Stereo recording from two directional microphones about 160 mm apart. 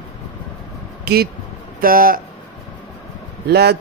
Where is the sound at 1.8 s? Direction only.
65° right (ahead or behind).